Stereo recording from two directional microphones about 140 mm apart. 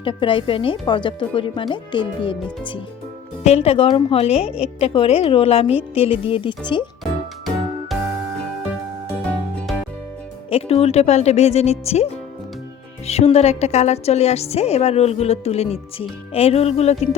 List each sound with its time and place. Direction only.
0.0 s speech: 35° left (ahead or behind)
3.4 s a woman's voice: 45° left (ahead or behind)
7.0 s music: centre (ahead or behind)
10.5 s a woman's voice: 45° left (ahead or behind)